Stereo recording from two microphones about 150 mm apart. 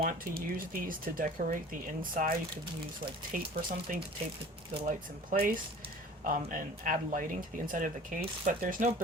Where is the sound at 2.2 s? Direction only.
60° right (ahead or behind).